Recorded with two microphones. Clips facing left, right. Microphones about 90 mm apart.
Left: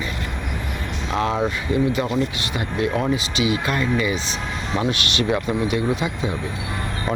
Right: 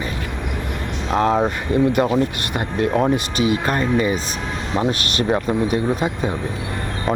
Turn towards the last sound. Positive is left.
turn(degrees=-45)  # may be behind; listen again after turning